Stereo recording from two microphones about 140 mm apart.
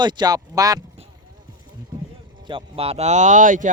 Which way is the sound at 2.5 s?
40° right (ahead or behind).